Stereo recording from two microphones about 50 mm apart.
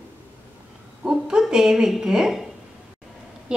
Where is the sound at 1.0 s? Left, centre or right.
Centre.